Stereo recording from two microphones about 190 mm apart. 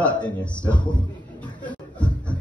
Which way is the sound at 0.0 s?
5° left (ahead or behind).